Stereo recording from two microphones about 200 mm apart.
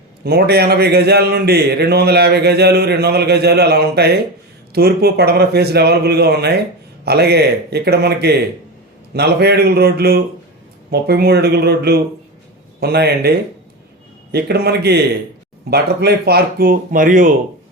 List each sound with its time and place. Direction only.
0.3 s a man's voice: 50° right (ahead or behind)
14.3 s a man's voice: 55° right (ahead or behind)